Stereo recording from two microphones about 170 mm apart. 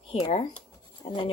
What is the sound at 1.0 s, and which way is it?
Speech, 30° left (ahead or behind).